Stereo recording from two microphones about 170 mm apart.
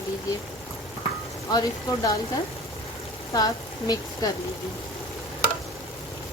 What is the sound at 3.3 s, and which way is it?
Speech, 20° left (ahead or behind).